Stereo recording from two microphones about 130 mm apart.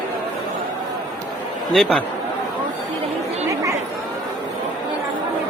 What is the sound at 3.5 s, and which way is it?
Chatter, 25° right (ahead or behind).